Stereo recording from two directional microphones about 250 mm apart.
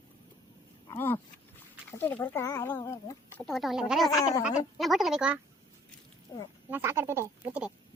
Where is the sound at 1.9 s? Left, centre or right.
Centre.